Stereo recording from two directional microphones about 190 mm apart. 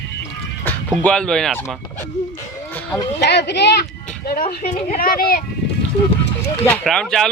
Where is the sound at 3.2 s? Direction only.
65° left (ahead or behind).